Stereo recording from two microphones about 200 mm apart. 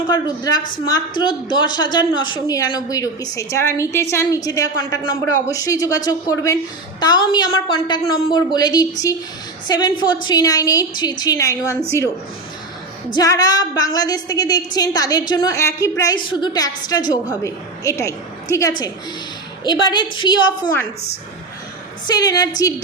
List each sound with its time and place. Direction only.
0.1 s a woman's voice: 20° left (ahead or behind)
13.1 s a woman's voice: 15° left (ahead or behind)
22.0 s a woman's voice: 20° left (ahead or behind)